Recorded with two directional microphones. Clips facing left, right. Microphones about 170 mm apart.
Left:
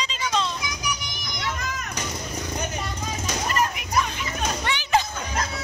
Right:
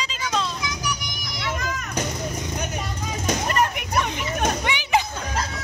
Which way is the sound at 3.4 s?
55° right (ahead or behind).